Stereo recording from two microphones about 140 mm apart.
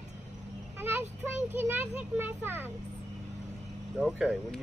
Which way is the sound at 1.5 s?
15° right (ahead or behind).